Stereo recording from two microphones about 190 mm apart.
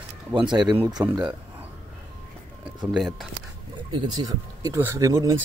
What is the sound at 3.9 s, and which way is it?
Speech, 20° right (ahead or behind).